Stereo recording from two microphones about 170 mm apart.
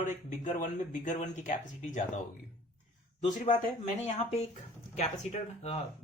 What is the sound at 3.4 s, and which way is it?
Speech, 35° left (ahead or behind).